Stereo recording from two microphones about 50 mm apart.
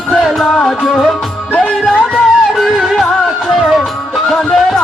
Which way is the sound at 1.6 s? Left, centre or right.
Centre.